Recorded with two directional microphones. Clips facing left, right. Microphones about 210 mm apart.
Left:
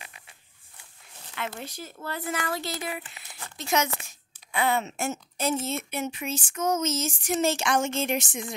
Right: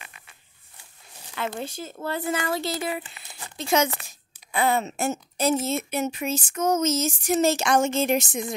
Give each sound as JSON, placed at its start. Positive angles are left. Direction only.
{"t": 1.5, "sound": "speech", "side_deg": -25}